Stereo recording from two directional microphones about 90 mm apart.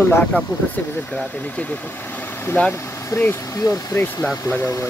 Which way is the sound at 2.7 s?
25° left (ahead or behind).